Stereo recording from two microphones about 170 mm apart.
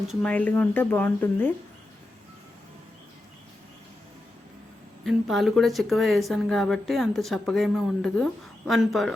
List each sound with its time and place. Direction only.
0.1 s speech: 5° left (ahead or behind)
5.0 s speech: centre (ahead or behind)